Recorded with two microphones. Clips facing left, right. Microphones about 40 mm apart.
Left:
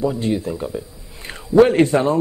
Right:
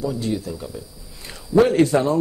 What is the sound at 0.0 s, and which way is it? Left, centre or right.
Speech, left.